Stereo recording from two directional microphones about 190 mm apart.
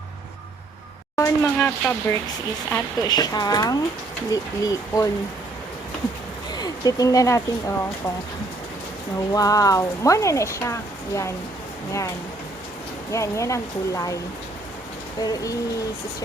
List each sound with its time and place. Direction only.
1.1 s speech: 15° left (ahead or behind)
6.5 s speech: 20° left (ahead or behind)
9.3 s speech: 20° left (ahead or behind)
13.1 s speech: 15° left (ahead or behind)
15.2 s speech: 20° left (ahead or behind)